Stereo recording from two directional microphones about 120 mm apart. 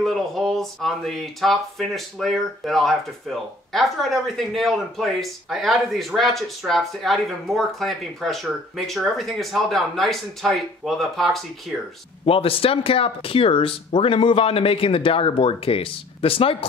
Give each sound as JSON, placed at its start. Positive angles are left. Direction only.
{"t": 0.0, "sound": "speech", "side_deg": 0}
{"t": 12.3, "sound": "speech", "side_deg": 50}